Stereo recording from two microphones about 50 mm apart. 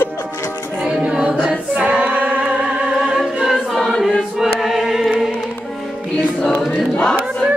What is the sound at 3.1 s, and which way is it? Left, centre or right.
Choir, centre.